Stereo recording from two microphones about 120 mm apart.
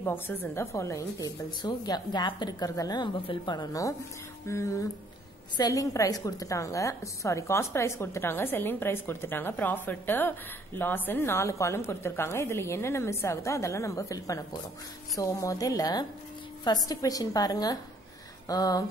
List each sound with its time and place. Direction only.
0.0 s a woman's voice: 15° left (ahead or behind)